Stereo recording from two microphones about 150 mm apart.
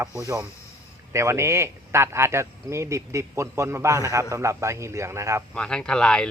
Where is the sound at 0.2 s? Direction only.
20° right (ahead or behind).